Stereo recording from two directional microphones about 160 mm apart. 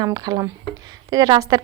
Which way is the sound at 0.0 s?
25° right (ahead or behind).